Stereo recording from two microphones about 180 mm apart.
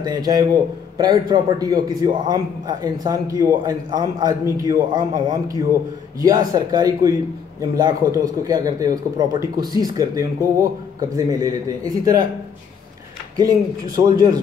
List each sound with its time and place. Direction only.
0.0 s a man's voice: 20° right (ahead or behind)
13.9 s a man's voice: 25° right (ahead or behind)